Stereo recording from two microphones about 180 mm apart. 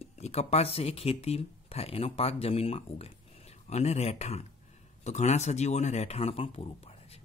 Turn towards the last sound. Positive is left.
turn(degrees=35)  # may be behind; listen again after turning